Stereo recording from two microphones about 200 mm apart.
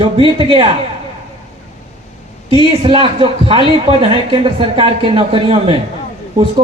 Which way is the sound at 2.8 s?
25° right (ahead or behind).